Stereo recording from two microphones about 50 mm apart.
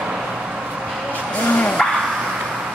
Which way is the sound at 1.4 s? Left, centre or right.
Left.